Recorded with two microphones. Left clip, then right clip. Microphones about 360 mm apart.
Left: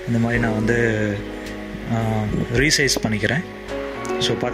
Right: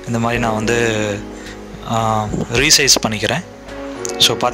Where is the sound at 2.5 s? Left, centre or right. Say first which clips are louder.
Right 6 dB; right.